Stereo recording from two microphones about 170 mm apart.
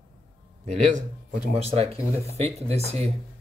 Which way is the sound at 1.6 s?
35° right (ahead or behind).